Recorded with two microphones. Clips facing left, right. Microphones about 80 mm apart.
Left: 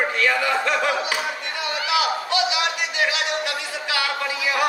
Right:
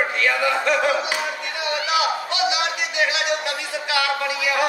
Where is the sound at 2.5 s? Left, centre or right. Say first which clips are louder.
Even; right.